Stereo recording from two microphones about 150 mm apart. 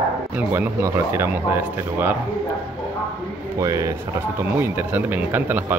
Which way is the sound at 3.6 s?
25° right (ahead or behind).